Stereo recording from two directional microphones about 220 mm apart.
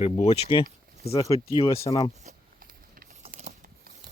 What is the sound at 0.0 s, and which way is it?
Speech, 30° left (ahead or behind).